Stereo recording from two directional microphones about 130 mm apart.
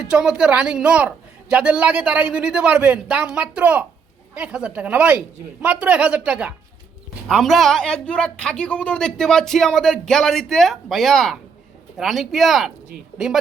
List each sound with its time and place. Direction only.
0.0 s a man's voice: 5° right (ahead or behind)